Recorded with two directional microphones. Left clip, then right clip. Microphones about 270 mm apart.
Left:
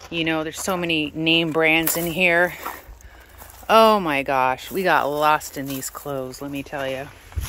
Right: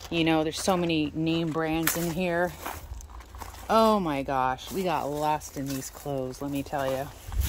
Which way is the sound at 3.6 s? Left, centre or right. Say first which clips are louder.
Left 8 dB; centre.